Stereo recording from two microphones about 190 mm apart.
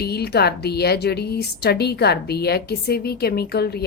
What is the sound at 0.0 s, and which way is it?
A woman's voice, 55° left (ahead or behind).